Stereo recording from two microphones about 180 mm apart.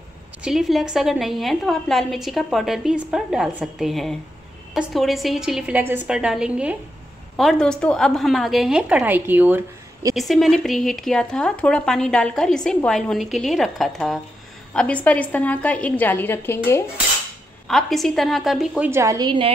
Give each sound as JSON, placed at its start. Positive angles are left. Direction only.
{"t": 0.4, "sound": "speech", "side_deg": 0}
{"t": 10.1, "sound": "speech", "side_deg": 0}
{"t": 17.6, "sound": "speech", "side_deg": 0}
{"t": 18.9, "sound": "a woman's voice", "side_deg": -15}